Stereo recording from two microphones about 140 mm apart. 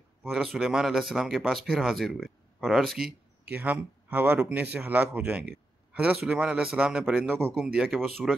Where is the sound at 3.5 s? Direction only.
10° right (ahead or behind).